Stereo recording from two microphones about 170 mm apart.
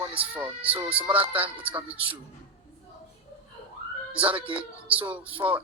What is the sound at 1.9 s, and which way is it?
Speech, 30° right (ahead or behind).